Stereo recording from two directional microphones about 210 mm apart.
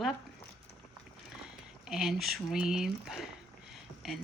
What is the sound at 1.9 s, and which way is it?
Speech, centre (ahead or behind).